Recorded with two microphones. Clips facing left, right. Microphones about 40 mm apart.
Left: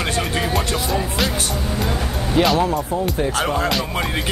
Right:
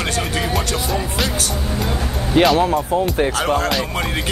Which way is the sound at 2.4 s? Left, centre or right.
Right.